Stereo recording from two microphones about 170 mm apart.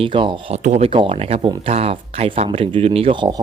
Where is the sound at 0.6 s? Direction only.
40° right (ahead or behind).